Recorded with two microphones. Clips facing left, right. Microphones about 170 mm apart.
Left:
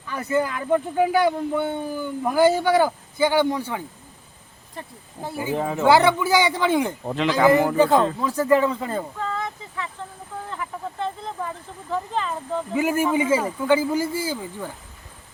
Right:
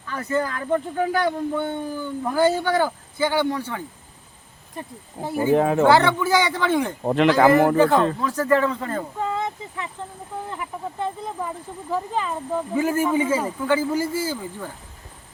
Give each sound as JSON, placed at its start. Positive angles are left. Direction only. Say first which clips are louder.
{"t": 0.1, "sound": "speech", "louder": "left 1 dB", "side_deg": 10}
{"t": 4.7, "sound": "speech", "louder": "right 3 dB", "side_deg": -15}
{"t": 5.5, "sound": "speech", "louder": "right 6 dB", "side_deg": -60}
{"t": 5.9, "sound": "speech", "louder": "left 1 dB", "side_deg": 10}
{"t": 7.0, "sound": "speech", "louder": "right 6 dB", "side_deg": -55}
{"t": 7.8, "sound": "speech", "louder": "even", "side_deg": 15}
{"t": 9.1, "sound": "a sound", "louder": "right 3 dB", "side_deg": -20}
{"t": 10.5, "sound": "speech", "louder": "even", "side_deg": -15}
{"t": 12.7, "sound": "speech", "louder": "even", "side_deg": 10}